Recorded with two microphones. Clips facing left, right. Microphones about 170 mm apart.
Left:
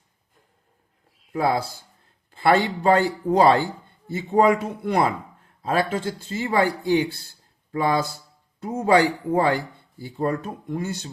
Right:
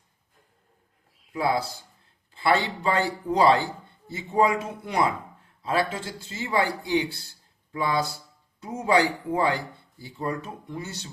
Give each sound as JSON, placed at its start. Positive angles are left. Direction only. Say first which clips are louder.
{"t": 1.3, "sound": "a man's voice", "louder": "left 3 dB", "side_deg": 50}